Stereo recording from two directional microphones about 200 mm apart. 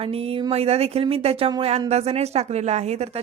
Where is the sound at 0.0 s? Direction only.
30° right (ahead or behind).